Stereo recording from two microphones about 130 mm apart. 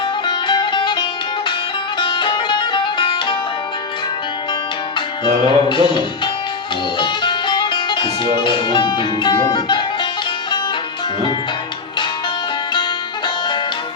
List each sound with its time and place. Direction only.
0.3 s music: 35° left (ahead or behind)
4.9 s music: 35° left (ahead or behind)